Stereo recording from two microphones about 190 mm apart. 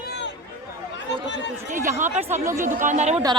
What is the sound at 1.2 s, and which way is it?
Speech, 70° left (ahead or behind).